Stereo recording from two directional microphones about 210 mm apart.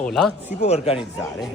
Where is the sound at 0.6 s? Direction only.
30° left (ahead or behind).